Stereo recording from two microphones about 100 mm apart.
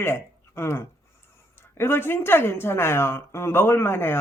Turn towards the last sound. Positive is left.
turn(degrees=25)  # may be behind; listen again after turning